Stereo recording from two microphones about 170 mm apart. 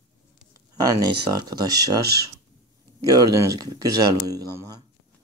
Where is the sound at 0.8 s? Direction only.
20° right (ahead or behind).